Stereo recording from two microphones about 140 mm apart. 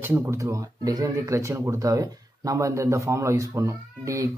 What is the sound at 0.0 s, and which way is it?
Speech, 20° right (ahead or behind).